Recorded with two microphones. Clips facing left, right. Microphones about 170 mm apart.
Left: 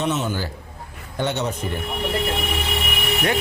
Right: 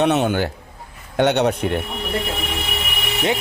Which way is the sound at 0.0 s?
65° right (ahead or behind).